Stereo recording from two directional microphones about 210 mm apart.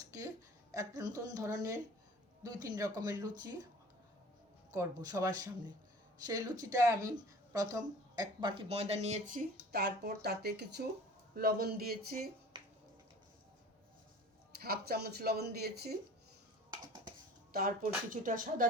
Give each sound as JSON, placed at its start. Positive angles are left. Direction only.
{"t": 0.7, "sound": "speech", "side_deg": -15}
{"t": 4.7, "sound": "speech", "side_deg": -15}
{"t": 12.5, "sound": "finger snapping", "side_deg": -20}
{"t": 14.5, "sound": "speech", "side_deg": -50}
{"t": 16.7, "sound": "dishes", "side_deg": -20}
{"t": 18.1, "sound": "speech", "side_deg": -40}